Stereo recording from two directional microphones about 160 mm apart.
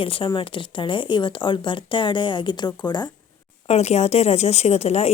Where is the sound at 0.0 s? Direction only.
35° left (ahead or behind).